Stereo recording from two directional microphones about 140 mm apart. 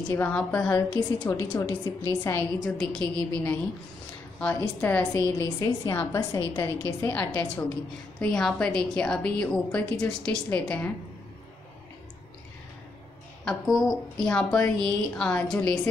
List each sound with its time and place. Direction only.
0.0 s a woman's voice: 10° left (ahead or behind)
2.6 s a woman's voice: 5° left (ahead or behind)
8.2 s a woman's voice: 5° left (ahead or behind)
13.5 s a woman's voice: centre (ahead or behind)